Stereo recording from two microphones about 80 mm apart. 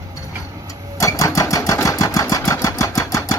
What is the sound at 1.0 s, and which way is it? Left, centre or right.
Sewing machine, left.